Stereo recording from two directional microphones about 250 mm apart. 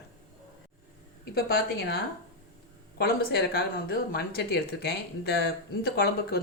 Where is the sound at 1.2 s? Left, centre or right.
Left.